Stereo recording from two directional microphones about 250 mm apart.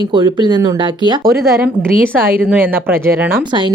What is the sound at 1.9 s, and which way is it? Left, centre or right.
Speech, right.